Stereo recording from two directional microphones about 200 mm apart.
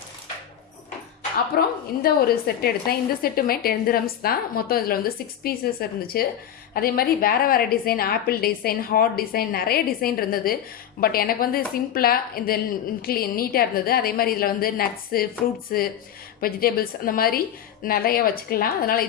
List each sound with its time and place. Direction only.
1.5 s a woman's voice: 50° left (ahead or behind)